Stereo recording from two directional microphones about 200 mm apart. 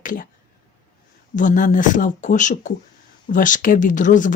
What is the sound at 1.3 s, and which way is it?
Speech, 40° left (ahead or behind).